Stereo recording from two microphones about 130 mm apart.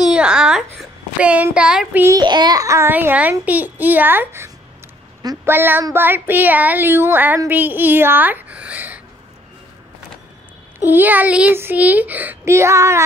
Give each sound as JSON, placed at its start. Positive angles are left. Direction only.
{"t": 0.0, "sound": "a sound", "side_deg": -5}
{"t": 1.2, "sound": "speech", "side_deg": -10}
{"t": 2.0, "sound": "speech", "side_deg": -30}
{"t": 10.8, "sound": "speech", "side_deg": -15}